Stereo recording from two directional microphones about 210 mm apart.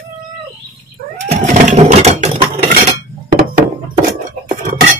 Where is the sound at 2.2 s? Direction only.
30° right (ahead or behind).